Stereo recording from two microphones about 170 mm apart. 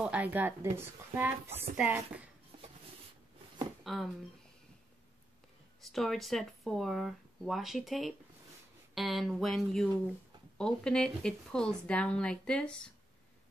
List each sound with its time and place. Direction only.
0.0 s speech: 10° right (ahead or behind)
3.8 s speech: centre (ahead or behind)
5.9 s speech: centre (ahead or behind)